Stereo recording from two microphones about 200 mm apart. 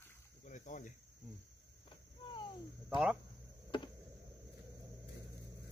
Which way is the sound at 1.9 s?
25° left (ahead or behind).